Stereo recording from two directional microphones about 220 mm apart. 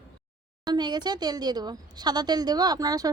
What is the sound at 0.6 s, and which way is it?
A woman's voice, 20° right (ahead or behind).